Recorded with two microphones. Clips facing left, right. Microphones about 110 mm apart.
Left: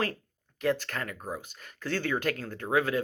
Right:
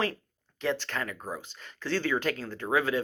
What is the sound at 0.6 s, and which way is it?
Speech, 45° left (ahead or behind).